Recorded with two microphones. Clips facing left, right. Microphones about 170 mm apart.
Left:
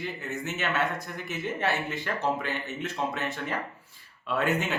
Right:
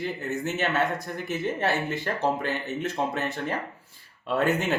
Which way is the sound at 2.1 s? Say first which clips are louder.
Right 2 dB; 35° right (ahead or behind).